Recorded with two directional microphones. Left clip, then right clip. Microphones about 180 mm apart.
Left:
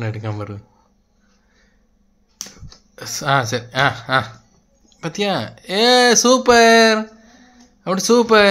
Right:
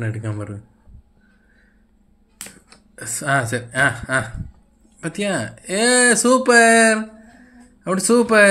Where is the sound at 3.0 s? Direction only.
20° left (ahead or behind).